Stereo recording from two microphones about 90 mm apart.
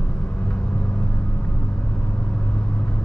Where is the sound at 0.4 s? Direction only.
10° left (ahead or behind).